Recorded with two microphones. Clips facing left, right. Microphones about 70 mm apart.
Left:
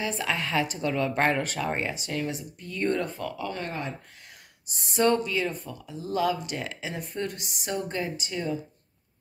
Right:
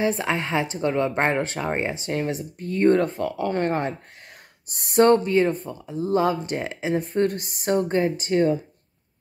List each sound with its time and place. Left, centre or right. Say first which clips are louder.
0.0 s speech: right 6 dB; right
3.3 s speech: right 13 dB; right